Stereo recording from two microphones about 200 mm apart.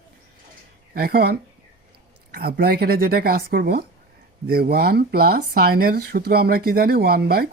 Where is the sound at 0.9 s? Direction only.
50° right (ahead or behind).